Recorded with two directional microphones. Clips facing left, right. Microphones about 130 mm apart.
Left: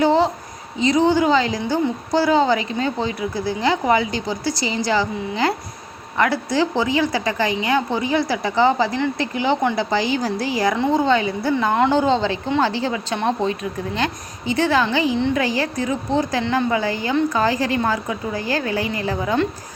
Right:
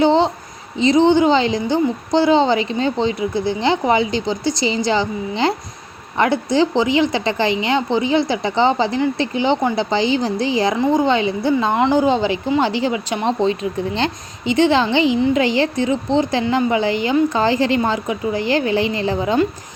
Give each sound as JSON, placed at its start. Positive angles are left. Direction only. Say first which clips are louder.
{"t": 0.0, "sound": "a sound", "louder": "right 2 dB", "side_deg": -25}
{"t": 0.8, "sound": "a woman's voice", "louder": "right 4 dB", "side_deg": -25}
{"t": 11.7, "sound": "a woman's voice", "louder": "even", "side_deg": -10}